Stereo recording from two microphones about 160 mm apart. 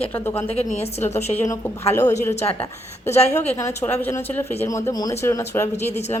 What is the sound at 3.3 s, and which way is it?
Speech, 15° left (ahead or behind).